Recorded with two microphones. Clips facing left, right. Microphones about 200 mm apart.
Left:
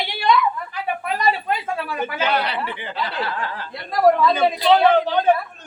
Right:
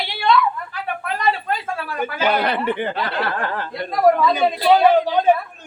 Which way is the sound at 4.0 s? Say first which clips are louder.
Even; centre (ahead or behind).